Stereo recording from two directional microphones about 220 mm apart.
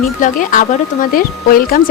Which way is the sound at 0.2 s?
35° left (ahead or behind).